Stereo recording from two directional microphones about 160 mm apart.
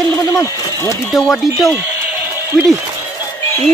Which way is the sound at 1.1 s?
Centre (ahead or behind).